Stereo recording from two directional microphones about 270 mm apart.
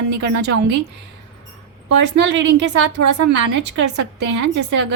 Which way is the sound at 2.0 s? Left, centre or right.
Right.